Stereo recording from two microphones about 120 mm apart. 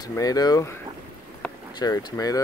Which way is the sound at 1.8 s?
30° left (ahead or behind).